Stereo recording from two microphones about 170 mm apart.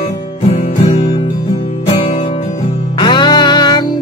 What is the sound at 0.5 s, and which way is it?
Music, 35° left (ahead or behind).